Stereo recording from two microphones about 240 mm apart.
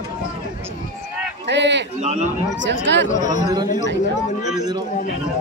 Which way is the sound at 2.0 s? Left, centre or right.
Right.